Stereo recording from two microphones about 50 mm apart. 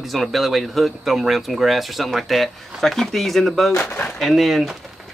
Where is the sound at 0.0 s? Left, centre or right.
Centre.